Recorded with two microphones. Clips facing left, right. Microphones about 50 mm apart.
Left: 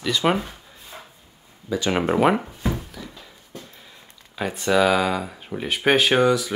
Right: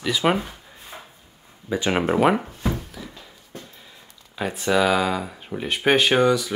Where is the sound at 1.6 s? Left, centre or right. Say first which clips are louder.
Even; right.